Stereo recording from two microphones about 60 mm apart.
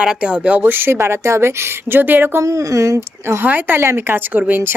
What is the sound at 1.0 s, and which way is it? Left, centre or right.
A woman's voice, right.